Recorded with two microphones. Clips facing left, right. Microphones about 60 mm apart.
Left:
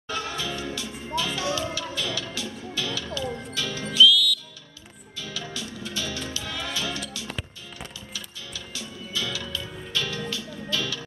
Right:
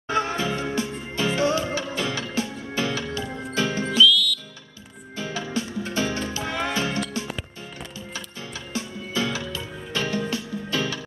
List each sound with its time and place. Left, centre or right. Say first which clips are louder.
0.1 s music: right 6 dB; right
4.0 s music: left 1 dB; centre
5.1 s music: right 7 dB; right
8.1 s music: right 4 dB; right